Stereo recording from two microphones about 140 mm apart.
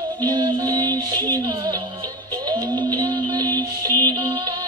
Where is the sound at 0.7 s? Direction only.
30° right (ahead or behind).